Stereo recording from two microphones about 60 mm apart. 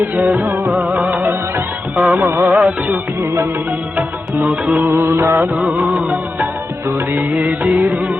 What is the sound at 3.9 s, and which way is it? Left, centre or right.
Music, right.